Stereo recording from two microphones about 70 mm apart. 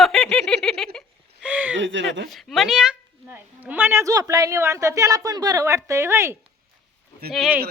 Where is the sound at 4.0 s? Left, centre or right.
Right.